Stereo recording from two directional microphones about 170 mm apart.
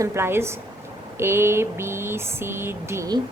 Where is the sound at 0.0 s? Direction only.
15° right (ahead or behind).